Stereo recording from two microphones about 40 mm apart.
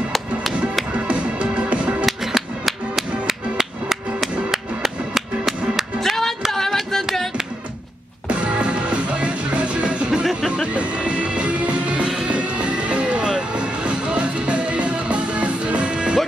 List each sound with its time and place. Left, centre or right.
0.1 s music: centre
1.0 s music: right
2.0 s music: centre
5.9 s music: centre
6.5 s a sound: centre
8.3 s music: right